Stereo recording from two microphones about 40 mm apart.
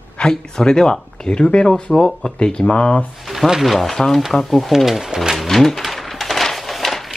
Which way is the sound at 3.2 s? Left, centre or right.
Centre.